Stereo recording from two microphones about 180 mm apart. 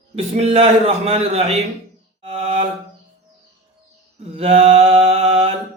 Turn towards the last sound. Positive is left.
turn(degrees=-35)  # may be behind; listen again after turning